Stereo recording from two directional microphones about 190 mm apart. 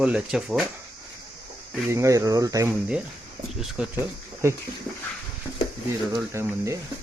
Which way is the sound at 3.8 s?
5° right (ahead or behind).